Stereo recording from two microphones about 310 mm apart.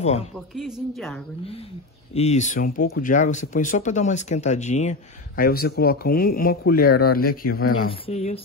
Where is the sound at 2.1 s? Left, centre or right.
Left.